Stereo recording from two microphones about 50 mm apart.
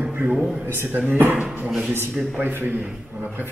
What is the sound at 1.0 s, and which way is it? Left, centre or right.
Speech, right.